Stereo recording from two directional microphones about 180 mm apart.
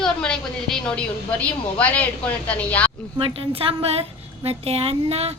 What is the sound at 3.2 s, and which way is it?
A woman's voice, 30° right (ahead or behind).